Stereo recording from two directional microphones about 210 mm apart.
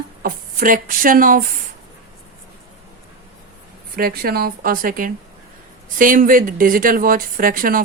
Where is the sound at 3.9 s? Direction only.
45° right (ahead or behind).